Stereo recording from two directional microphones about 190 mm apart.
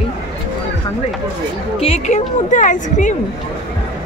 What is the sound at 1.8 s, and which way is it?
A woman's voice, 35° left (ahead or behind).